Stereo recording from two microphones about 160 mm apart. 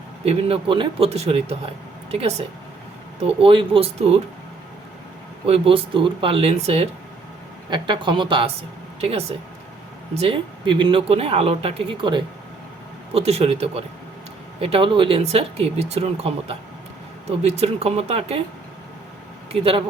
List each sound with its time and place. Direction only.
0.3 s speech: 35° right (ahead or behind)
5.5 s speech: 35° right (ahead or behind)
7.7 s speech: 30° right (ahead or behind)
19.5 s speech: 35° right (ahead or behind)